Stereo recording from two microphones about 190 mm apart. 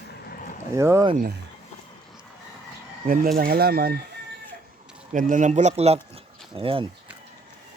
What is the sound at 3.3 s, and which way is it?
Speech, 50° right (ahead or behind).